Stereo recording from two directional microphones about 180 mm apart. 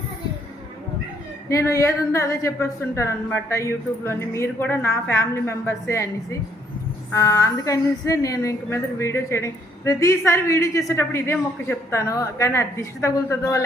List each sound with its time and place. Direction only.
1.5 s a woman's voice: 15° left (ahead or behind)
7.1 s a woman's voice: 20° left (ahead or behind)